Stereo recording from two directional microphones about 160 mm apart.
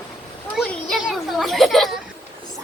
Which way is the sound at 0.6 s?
Centre (ahead or behind).